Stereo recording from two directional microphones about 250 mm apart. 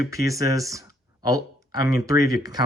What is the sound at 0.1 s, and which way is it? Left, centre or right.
Speech, centre.